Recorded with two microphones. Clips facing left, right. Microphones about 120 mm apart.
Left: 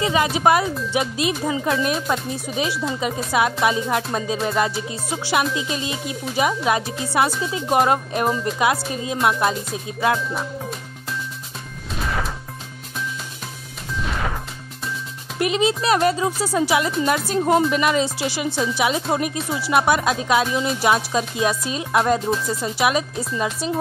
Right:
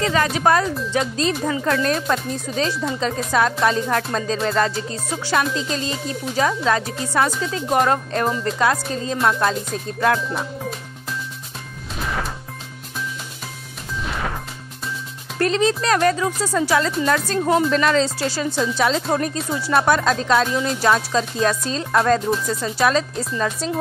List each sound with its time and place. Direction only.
0.0 s music: 15° left (ahead or behind)
12.0 s music: centre (ahead or behind)
14.0 s music: centre (ahead or behind)
15.3 s music: 15° left (ahead or behind)